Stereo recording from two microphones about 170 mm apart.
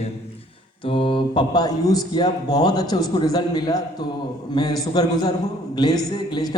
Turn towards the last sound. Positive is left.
turn(degrees=25)  # may be behind; listen again after turning